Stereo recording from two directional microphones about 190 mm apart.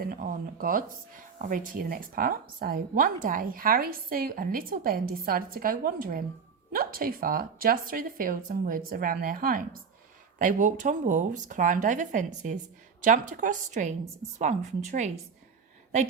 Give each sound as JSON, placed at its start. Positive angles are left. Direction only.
{"t": 0.0, "sound": "a woman's voice", "side_deg": -50}